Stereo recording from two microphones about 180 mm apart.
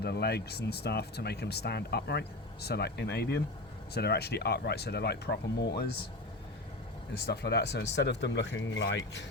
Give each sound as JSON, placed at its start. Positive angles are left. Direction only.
{"t": 0.0, "sound": "speech", "side_deg": 65}
{"t": 7.1, "sound": "speech", "side_deg": 65}